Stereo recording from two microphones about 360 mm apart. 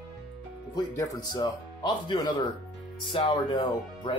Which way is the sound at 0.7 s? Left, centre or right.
Centre.